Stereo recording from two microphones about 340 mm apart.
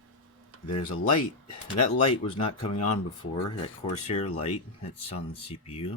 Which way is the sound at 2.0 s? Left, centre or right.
Centre.